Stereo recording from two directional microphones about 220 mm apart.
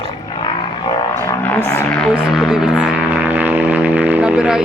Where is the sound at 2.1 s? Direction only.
5° right (ahead or behind).